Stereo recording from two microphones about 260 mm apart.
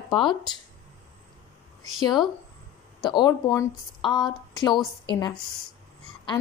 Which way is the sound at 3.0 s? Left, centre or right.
Centre.